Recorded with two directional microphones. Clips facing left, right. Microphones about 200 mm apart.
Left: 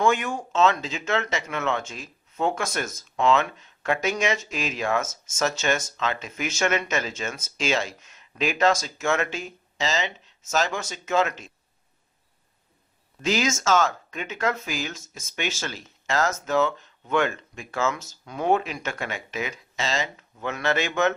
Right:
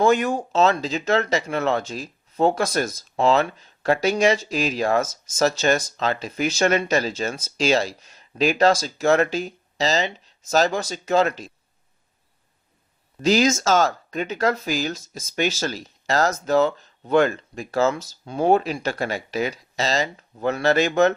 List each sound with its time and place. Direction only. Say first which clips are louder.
0.0 s speech: right 5 dB; 35° right (ahead or behind)
13.2 s speech: right 6 dB; 35° right (ahead or behind)